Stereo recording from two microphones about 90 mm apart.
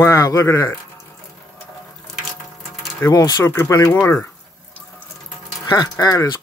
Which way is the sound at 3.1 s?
45° left (ahead or behind).